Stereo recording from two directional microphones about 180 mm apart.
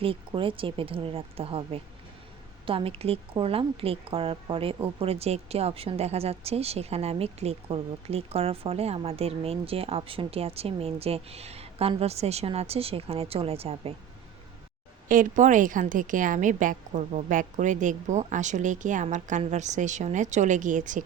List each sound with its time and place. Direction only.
0.0 s a woman's voice: 30° right (ahead or behind)
15.1 s a woman's voice: 45° right (ahead or behind)